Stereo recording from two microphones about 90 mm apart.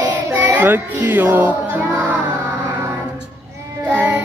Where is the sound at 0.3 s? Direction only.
20° right (ahead or behind).